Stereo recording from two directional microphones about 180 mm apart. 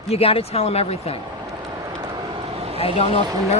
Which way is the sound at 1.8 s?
20° right (ahead or behind).